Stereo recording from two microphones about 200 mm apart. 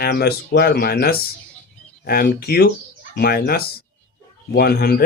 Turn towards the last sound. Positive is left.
turn(degrees=50)  # may be behind; listen again after turning